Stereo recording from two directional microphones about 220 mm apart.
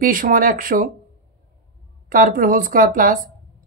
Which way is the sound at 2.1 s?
40° right (ahead or behind).